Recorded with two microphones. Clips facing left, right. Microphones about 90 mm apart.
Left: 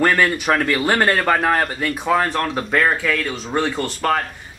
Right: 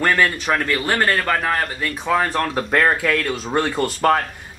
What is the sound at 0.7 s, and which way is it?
Speech, 15° left (ahead or behind).